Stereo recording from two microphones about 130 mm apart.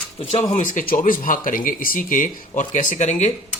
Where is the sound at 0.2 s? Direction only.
45° left (ahead or behind).